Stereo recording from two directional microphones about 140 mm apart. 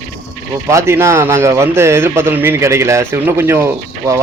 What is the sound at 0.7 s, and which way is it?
A man's voice, 20° right (ahead or behind).